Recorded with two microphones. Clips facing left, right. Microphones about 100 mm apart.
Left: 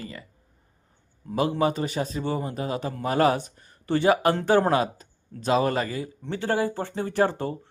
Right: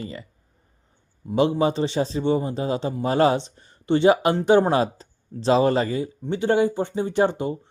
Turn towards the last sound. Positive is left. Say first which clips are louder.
# right 3 dB
turn(degrees=-15)  # may be behind; listen again after turning